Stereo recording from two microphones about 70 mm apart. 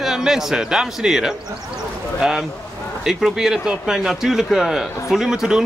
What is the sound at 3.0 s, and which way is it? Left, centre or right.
Speech, centre.